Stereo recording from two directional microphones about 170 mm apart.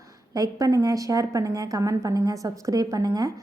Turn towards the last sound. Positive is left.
turn(degrees=-20)  # may be behind; listen again after turning